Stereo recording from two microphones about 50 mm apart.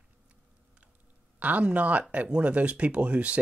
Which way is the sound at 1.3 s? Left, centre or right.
Right.